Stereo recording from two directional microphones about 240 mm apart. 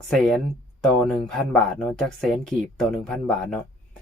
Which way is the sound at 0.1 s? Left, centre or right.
Centre.